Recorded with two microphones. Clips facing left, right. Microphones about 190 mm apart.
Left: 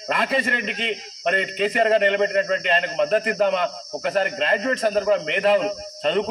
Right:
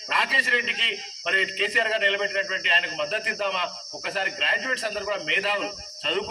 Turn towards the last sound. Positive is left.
turn(degrees=50)  # may be behind; listen again after turning